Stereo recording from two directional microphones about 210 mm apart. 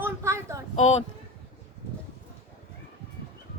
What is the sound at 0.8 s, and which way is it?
Speech, 30° left (ahead or behind).